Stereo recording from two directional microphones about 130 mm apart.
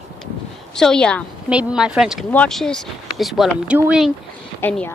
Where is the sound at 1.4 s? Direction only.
5° right (ahead or behind).